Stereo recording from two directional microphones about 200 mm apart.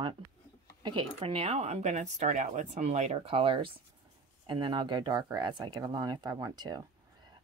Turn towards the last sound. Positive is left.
turn(degrees=-20)  # may be behind; listen again after turning